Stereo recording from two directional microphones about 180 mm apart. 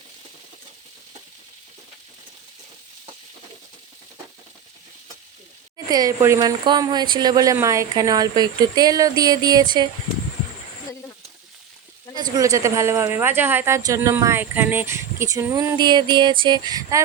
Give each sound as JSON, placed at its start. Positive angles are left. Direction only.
{"t": 5.7, "sound": "speech", "side_deg": -20}
{"t": 12.1, "sound": "a woman's voice", "side_deg": -20}